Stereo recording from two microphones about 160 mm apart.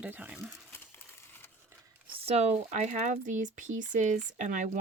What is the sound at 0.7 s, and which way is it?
Crumpling, 15° left (ahead or behind).